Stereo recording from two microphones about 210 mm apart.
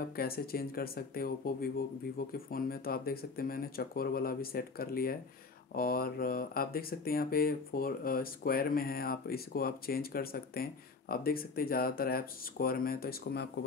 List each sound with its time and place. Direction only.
0.1 s speech: 45° left (ahead or behind)